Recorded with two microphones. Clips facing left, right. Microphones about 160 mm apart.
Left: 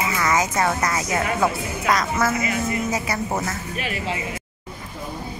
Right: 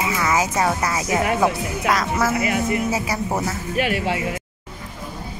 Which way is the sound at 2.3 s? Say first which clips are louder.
Right 3 dB; 70° right (ahead or behind).